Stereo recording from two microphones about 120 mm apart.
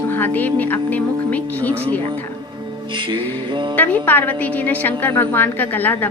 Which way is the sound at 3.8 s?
15° left (ahead or behind).